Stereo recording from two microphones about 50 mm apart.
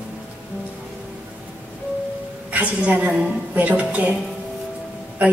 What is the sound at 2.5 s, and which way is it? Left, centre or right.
A woman's voice, right.